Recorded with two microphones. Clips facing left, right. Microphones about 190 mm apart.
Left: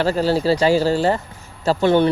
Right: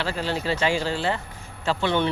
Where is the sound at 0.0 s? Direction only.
40° left (ahead or behind).